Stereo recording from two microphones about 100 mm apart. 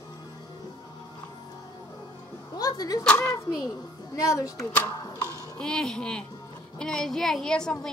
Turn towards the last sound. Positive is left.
turn(degrees=5)  # may be behind; listen again after turning